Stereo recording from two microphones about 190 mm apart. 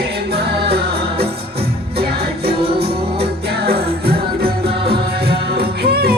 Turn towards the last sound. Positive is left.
turn(degrees=-55)  # may be behind; listen again after turning